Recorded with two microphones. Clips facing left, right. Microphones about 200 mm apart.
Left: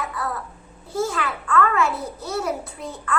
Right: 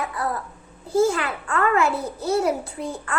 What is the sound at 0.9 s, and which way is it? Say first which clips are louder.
A child's voice: right 5 dB; 30° right (ahead or behind).